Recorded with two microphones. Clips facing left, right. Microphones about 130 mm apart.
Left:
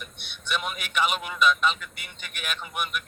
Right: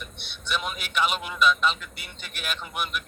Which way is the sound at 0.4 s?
Centre (ahead or behind).